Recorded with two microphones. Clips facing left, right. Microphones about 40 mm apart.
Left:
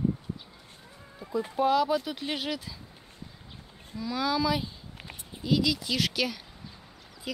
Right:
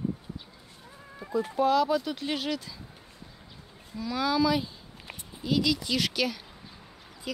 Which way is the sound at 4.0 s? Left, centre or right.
Centre.